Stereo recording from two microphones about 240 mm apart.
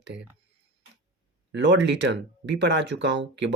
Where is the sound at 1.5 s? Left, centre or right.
Right.